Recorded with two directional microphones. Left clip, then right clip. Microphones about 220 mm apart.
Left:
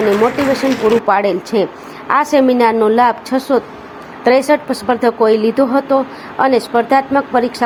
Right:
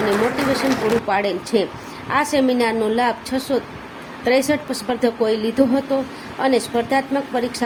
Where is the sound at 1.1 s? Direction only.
20° left (ahead or behind).